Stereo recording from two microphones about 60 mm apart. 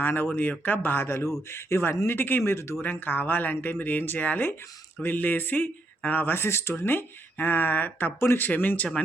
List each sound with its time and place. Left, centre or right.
0.0 s speech: left
2.0 s speech: left
2.4 s speech: left
2.8 s speech: left
8.2 s speech: left
8.4 s speech: left